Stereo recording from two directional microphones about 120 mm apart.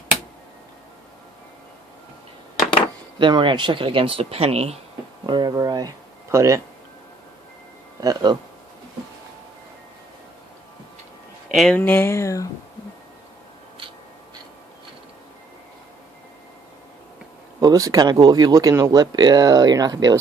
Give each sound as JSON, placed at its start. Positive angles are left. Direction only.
{"t": 3.2, "sound": "speech", "side_deg": -40}
{"t": 5.2, "sound": "speech", "side_deg": -40}
{"t": 8.0, "sound": "speech", "side_deg": -35}
{"t": 11.7, "sound": "speech", "side_deg": 15}
{"t": 17.6, "sound": "speech", "side_deg": -30}